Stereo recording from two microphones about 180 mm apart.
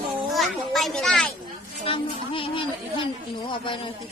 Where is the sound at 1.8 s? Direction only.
30° left (ahead or behind).